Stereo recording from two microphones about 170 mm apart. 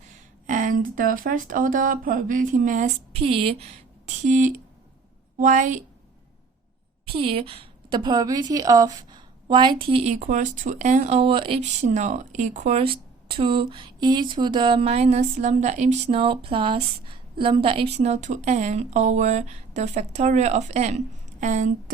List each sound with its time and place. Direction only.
0.1 s a woman's voice: 50° right (ahead or behind)
7.0 s a woman's voice: 35° right (ahead or behind)
10.0 s a woman's voice: 45° right (ahead or behind)